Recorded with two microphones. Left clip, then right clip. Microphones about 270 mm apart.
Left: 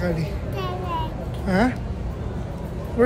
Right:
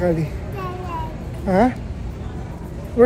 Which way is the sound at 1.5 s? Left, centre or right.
Centre.